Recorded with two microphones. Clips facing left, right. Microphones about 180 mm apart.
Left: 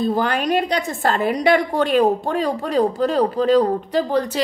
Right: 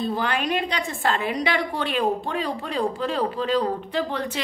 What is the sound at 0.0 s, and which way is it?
A woman's voice, 45° left (ahead or behind).